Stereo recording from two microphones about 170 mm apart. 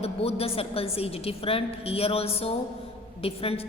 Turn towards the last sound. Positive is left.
turn(degrees=35)  # may be behind; listen again after turning